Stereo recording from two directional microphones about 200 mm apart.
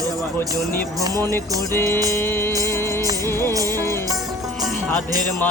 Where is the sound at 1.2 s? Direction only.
10° left (ahead or behind).